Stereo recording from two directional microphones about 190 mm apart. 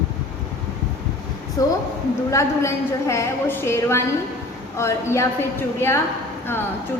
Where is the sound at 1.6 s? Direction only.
20° left (ahead or behind).